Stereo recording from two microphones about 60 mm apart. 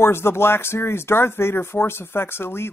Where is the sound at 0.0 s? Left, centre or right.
Left.